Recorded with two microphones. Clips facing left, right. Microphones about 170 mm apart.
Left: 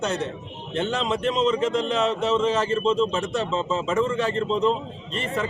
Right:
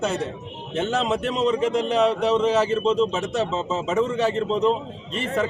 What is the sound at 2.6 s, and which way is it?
Speech, centre (ahead or behind).